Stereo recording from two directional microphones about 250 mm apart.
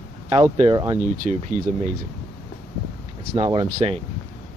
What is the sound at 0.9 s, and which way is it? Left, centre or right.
Speech, right.